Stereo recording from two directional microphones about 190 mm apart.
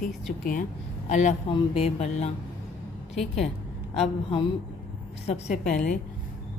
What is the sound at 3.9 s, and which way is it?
Speech, 30° left (ahead or behind).